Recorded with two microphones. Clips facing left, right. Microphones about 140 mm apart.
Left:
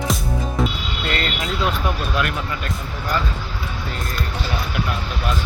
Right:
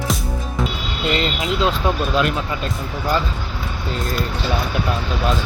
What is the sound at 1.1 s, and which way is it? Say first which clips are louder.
Speech: right 5 dB; 20° right (ahead or behind).